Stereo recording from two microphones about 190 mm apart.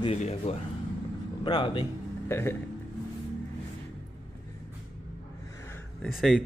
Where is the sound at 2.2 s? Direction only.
15° left (ahead or behind).